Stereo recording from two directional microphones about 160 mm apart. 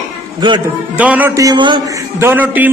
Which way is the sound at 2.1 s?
15° right (ahead or behind).